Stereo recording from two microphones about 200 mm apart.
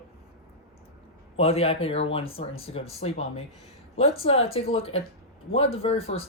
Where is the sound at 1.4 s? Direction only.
30° left (ahead or behind).